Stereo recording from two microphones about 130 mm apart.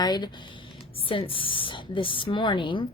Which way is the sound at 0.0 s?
30° left (ahead or behind).